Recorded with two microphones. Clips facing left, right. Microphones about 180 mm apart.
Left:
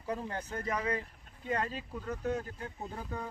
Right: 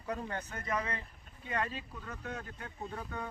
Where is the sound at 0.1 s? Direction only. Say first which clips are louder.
Left 2 dB; 30° left (ahead or behind).